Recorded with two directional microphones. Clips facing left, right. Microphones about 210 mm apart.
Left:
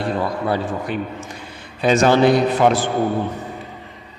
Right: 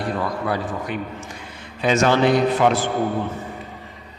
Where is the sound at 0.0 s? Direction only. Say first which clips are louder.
Left 3 dB; 25° left (ahead or behind).